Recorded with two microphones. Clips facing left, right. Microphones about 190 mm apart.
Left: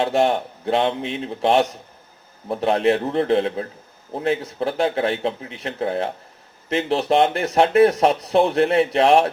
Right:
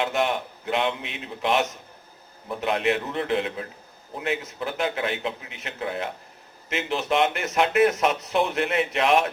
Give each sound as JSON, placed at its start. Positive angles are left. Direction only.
{"t": 0.0, "sound": "speech", "side_deg": 35}